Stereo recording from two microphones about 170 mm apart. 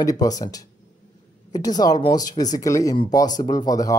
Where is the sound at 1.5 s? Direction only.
20° left (ahead or behind).